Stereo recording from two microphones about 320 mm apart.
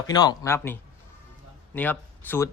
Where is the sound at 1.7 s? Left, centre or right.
Centre.